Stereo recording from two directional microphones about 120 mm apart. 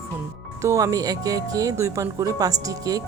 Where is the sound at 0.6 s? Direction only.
25° right (ahead or behind).